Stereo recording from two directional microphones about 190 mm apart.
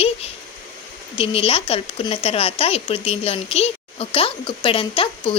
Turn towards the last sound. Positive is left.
turn(degrees=30)  # may be behind; listen again after turning